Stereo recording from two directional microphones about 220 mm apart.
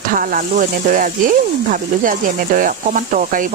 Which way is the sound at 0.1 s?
40° right (ahead or behind).